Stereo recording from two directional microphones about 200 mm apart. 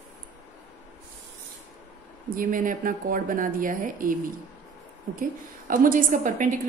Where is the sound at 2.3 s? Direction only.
45° right (ahead or behind).